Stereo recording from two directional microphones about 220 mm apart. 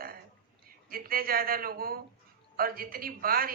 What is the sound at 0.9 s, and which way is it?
A woman's voice, 40° right (ahead or behind).